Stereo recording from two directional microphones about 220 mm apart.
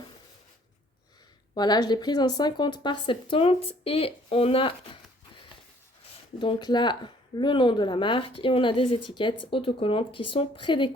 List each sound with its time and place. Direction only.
1.5 s speech: 20° left (ahead or behind)
6.4 s speech: 20° left (ahead or behind)